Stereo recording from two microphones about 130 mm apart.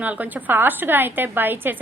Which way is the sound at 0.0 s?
10° right (ahead or behind).